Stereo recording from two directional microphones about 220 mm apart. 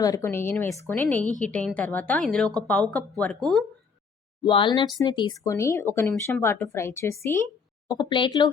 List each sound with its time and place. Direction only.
0.0 s a woman's voice: 15° left (ahead or behind)
4.4 s speech: 20° left (ahead or behind)